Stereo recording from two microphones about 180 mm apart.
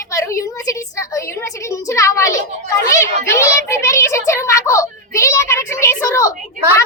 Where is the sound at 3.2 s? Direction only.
15° left (ahead or behind).